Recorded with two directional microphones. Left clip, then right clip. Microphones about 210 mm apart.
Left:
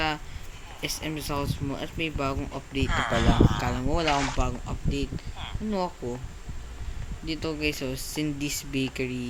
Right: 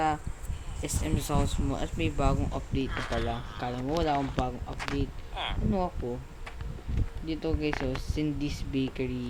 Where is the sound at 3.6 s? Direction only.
15° left (ahead or behind).